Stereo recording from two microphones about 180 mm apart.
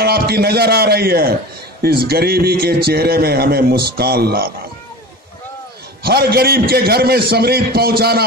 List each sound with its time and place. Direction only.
0.0 s a man's voice: 60° right (ahead or behind)
6.0 s a man's voice: 60° right (ahead or behind)